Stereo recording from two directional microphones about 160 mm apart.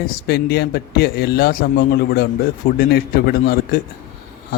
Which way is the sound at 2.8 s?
75° left (ahead or behind).